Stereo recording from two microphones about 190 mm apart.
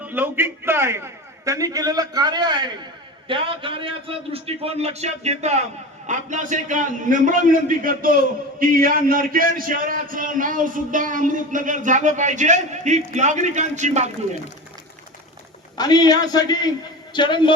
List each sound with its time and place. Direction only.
0.0 s a man's voice: 10° right (ahead or behind); by 14.1 s 35° right (ahead or behind)
15.8 s a man's voice: 20° left (ahead or behind)